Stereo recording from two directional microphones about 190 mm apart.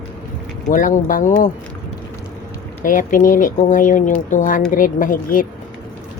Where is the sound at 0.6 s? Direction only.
45° left (ahead or behind).